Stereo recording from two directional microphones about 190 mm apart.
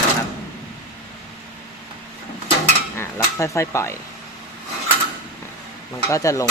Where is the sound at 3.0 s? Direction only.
15° left (ahead or behind).